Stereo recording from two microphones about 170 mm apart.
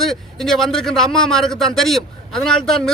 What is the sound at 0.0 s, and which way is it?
A man's voice, centre (ahead or behind).